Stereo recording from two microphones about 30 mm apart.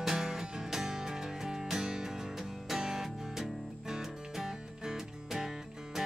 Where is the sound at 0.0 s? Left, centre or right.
Centre.